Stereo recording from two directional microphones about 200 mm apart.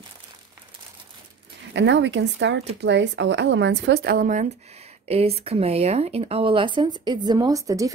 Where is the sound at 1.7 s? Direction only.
60° right (ahead or behind).